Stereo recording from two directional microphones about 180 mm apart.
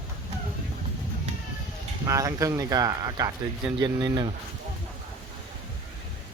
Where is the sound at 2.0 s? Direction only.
15° right (ahead or behind).